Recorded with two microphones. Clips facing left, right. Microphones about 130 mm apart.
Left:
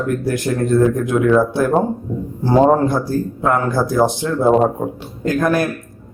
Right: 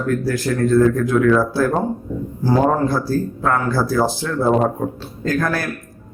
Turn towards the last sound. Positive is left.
turn(degrees=20)  # may be behind; listen again after turning